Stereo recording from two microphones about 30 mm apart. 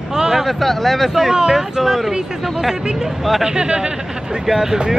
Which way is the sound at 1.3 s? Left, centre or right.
Right.